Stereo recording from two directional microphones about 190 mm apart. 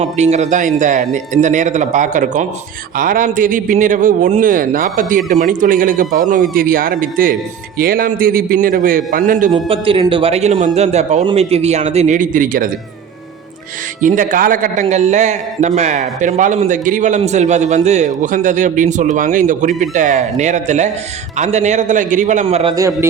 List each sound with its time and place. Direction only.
0.0 s a man's voice: 35° right (ahead or behind)
9.5 s a man's voice: 30° right (ahead or behind); by 12.7 s 45° right (ahead or behind)
14.0 s a man's voice: 45° right (ahead or behind)
22.7 s a man's voice: 15° right (ahead or behind)